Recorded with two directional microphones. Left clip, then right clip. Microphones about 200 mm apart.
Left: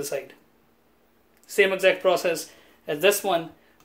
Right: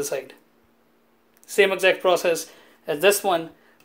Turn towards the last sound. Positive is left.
turn(degrees=-25)  # may be behind; listen again after turning